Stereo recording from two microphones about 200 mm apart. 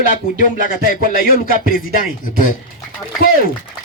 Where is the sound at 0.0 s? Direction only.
40° left (ahead or behind).